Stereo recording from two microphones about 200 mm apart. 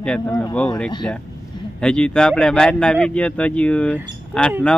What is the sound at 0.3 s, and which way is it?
Speech, 15° left (ahead or behind).